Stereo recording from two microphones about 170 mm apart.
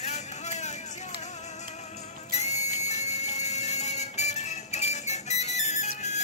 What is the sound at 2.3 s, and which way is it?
Music, 40° left (ahead or behind).